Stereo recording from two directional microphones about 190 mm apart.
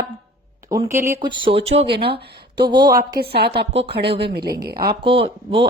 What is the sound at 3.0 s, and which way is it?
Speech, 55° right (ahead or behind).